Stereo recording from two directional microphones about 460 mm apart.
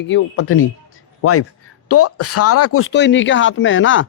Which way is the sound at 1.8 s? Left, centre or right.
Left.